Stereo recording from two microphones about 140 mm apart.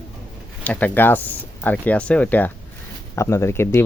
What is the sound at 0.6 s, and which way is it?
Speech, 15° left (ahead or behind).